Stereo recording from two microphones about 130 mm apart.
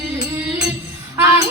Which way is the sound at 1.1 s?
20° right (ahead or behind).